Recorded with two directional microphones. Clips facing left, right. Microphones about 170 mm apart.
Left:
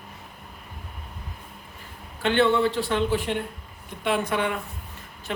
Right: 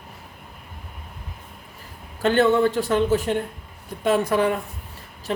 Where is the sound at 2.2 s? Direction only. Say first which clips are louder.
Right 3 dB; 45° right (ahead or behind).